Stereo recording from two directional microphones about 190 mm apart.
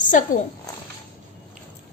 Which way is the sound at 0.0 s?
40° left (ahead or behind).